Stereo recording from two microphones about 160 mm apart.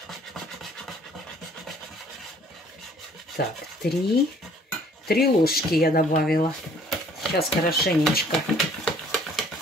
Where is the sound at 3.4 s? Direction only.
80° left.